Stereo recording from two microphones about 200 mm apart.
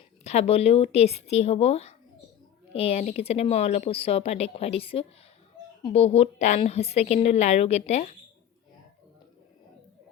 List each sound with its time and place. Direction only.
0.3 s a woman's voice: 30° left (ahead or behind)